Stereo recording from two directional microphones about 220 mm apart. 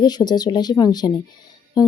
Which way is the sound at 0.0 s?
20° left (ahead or behind).